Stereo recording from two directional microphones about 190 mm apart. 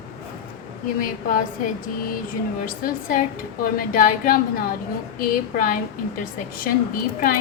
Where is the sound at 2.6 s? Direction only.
45° left (ahead or behind).